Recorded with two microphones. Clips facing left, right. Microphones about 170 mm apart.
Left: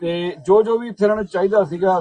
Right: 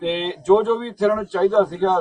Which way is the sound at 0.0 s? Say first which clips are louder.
Left 2 dB; centre (ahead or behind).